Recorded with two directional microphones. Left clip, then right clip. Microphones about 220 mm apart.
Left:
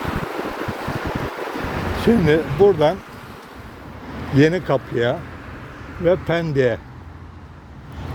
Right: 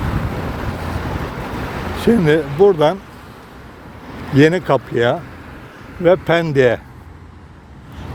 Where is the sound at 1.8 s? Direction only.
30° right (ahead or behind).